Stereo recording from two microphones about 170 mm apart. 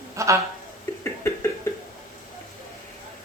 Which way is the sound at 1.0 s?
15° left (ahead or behind).